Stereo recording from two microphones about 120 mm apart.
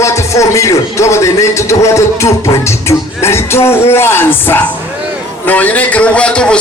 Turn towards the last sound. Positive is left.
turn(degrees=10)  # may be behind; listen again after turning